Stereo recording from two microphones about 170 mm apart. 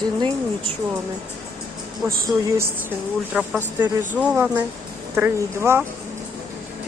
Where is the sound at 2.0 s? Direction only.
15° right (ahead or behind).